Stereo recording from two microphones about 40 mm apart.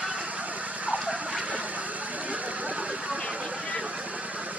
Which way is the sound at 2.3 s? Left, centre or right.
Right.